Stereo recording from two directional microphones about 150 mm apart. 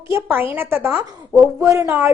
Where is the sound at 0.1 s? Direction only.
15° right (ahead or behind).